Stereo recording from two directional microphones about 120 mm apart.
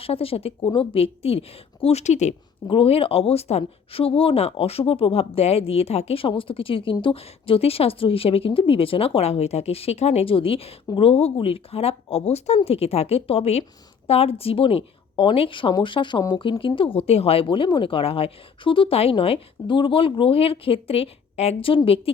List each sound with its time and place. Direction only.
0.0 s a woman's voice: 50° left (ahead or behind); by 2.3 s 70° left (ahead or behind)
2.6 s a woman's voice: 50° left (ahead or behind)